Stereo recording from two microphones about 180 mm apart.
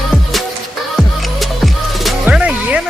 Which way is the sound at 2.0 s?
5° right (ahead or behind).